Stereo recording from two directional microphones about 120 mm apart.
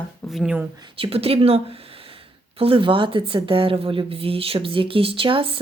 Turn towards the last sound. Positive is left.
turn(degrees=-50)  # may be behind; listen again after turning